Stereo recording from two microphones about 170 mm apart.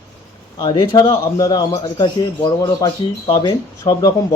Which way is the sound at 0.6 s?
25° left (ahead or behind).